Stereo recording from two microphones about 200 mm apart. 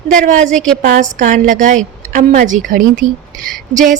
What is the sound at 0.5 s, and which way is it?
Speech, 5° left (ahead or behind).